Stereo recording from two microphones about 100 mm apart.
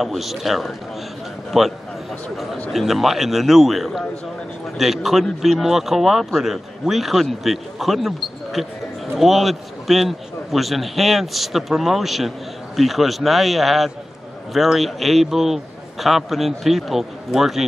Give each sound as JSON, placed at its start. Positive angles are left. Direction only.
{"t": 0.0, "sound": "speech", "side_deg": 0}